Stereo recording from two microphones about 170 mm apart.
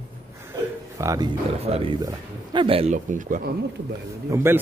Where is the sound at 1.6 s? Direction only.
35° right (ahead or behind).